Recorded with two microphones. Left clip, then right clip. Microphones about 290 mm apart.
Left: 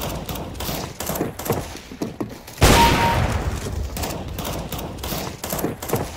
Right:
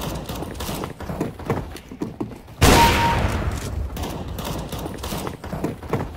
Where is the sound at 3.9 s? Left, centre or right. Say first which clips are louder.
Left 3 dB; centre.